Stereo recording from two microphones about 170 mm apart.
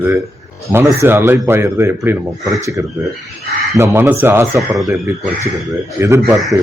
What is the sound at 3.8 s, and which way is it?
A man's voice, 15° right (ahead or behind).